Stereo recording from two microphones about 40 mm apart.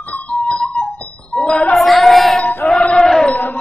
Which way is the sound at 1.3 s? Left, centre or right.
Left.